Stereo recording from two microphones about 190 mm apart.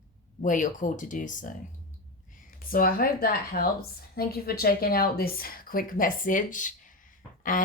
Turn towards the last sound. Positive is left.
turn(degrees=45)  # may be behind; listen again after turning